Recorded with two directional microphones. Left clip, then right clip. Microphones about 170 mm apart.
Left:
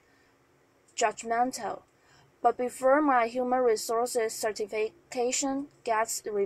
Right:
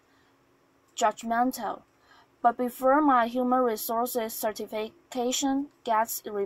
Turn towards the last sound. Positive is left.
turn(degrees=-25)  # may be behind; listen again after turning